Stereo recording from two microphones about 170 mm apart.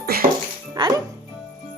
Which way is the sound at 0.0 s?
65° right (ahead or behind).